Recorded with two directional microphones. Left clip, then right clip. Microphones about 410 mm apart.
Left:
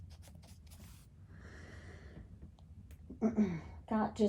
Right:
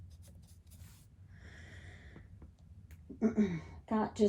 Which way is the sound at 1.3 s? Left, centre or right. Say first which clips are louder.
Even; centre.